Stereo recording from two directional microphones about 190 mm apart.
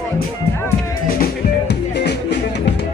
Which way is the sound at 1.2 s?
60° left (ahead or behind).